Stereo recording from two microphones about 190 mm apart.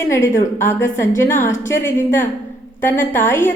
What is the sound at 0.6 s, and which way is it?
A woman's voice, 10° left (ahead or behind).